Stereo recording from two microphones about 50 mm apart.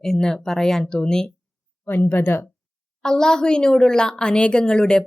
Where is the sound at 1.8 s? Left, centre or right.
Left.